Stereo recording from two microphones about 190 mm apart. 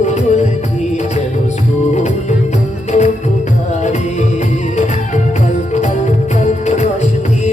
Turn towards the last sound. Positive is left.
turn(degrees=35)  # may be behind; listen again after turning